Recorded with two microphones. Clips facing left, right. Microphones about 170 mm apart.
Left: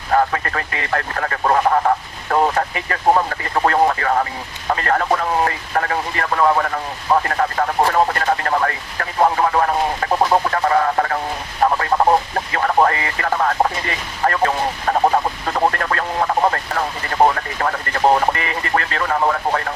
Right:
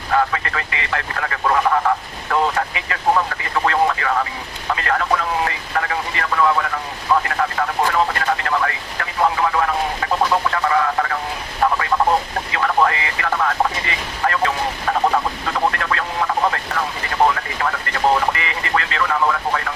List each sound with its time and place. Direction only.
0.1 s speech: 40° left (ahead or behind)